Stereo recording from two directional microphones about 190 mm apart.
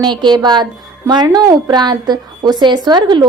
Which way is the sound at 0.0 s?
25° right (ahead or behind).